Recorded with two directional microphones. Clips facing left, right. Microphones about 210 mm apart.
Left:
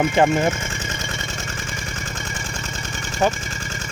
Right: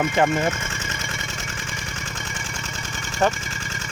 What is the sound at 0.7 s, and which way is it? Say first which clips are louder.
Engine: left 3 dB; 35° left (ahead or behind).